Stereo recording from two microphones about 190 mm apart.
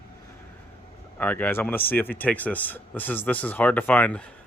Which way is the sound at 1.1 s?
10° left (ahead or behind).